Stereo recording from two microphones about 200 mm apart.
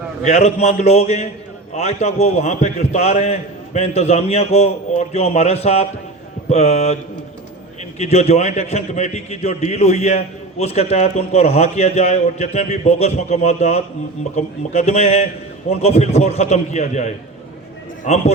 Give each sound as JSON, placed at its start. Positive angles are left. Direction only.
{"t": 0.3, "sound": "a man's voice", "side_deg": 35}
{"t": 7.9, "sound": "a man's voice", "side_deg": 35}